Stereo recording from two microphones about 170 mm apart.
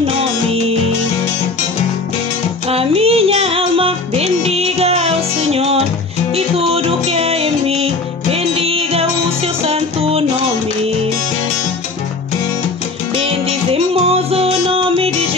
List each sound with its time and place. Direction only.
2.7 s music: 35° right (ahead or behind)
13.5 s music: 35° right (ahead or behind)